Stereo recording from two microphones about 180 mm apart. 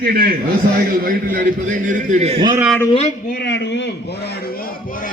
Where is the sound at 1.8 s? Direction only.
45° right (ahead or behind).